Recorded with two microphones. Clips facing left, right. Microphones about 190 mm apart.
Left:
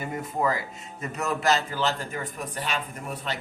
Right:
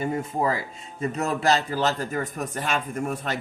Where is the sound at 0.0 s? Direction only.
30° right (ahead or behind).